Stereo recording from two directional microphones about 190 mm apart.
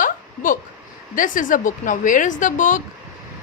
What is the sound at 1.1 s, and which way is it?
Speech, 45° left (ahead or behind).